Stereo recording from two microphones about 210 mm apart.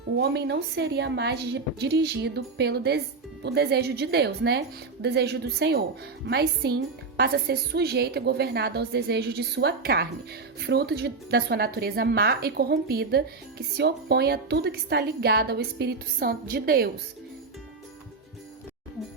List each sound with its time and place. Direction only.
0.2 s a woman's voice: 55° right (ahead or behind)